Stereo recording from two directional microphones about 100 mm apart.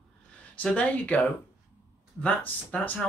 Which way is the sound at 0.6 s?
15° left (ahead or behind).